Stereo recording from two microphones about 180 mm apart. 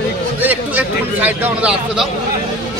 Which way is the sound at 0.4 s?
10° right (ahead or behind).